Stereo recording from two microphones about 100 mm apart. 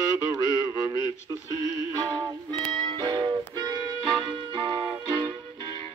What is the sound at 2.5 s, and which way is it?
Music, 65° right (ahead or behind).